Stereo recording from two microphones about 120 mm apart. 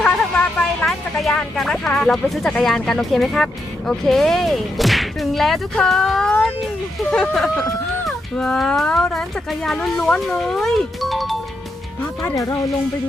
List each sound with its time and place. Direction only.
0.0 s speech: 5° left (ahead or behind)
12.2 s speech: 25° left (ahead or behind)